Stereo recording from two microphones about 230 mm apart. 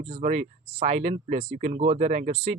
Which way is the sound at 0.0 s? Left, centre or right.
Right.